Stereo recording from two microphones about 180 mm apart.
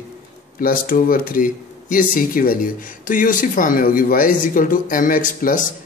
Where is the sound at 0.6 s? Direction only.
50° left (ahead or behind).